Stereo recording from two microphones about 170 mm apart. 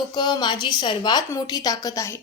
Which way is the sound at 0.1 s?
25° left (ahead or behind).